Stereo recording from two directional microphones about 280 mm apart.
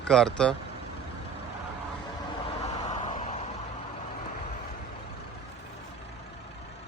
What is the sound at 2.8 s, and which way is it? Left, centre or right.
Vehicle, centre.